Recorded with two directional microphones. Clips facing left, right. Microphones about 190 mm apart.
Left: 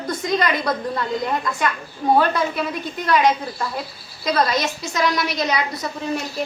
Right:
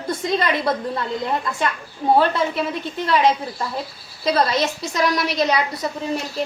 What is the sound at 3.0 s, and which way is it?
A woman's voice, 25° right (ahead or behind).